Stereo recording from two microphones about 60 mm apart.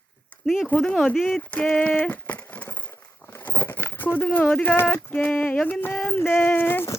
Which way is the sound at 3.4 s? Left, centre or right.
Left.